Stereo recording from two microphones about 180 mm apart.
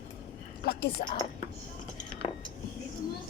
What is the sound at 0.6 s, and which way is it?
Speech, 60° left (ahead or behind).